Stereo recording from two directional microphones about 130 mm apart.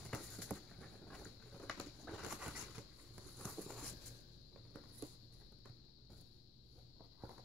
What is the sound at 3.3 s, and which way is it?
Walk, 5° left (ahead or behind).